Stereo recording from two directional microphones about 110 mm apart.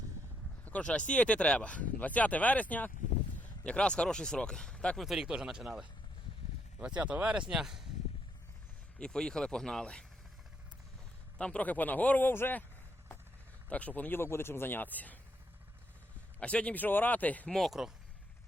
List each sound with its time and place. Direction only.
0.6 s speech: 10° left (ahead or behind)
9.0 s speech: 5° left (ahead or behind)
11.3 s speech: 10° left (ahead or behind)
13.7 s speech: 15° left (ahead or behind)
16.4 s speech: 10° left (ahead or behind)
17.6 s speech: 5° right (ahead or behind)